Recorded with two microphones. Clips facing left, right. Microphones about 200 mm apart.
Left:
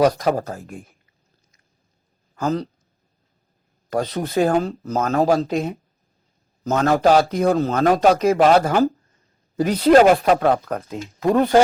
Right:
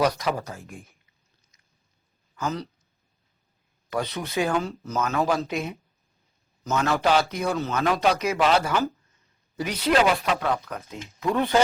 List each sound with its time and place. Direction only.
0.0 s speech: 45° left (ahead or behind)
2.3 s speech: 50° left (ahead or behind)
3.8 s speech: 45° left (ahead or behind)
4.8 s speech: 55° left (ahead or behind)
5.0 s speech: 40° left (ahead or behind)